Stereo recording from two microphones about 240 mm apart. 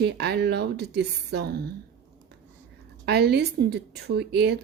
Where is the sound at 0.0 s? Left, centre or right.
Right.